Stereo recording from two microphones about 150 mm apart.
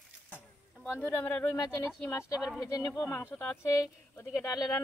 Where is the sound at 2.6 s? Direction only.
25° left (ahead or behind).